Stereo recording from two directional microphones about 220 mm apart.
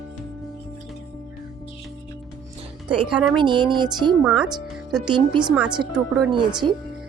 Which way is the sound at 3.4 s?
20° right (ahead or behind).